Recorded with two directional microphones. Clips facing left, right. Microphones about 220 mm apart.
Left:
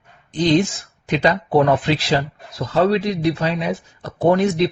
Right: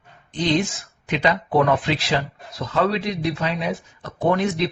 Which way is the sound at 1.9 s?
Centre (ahead or behind).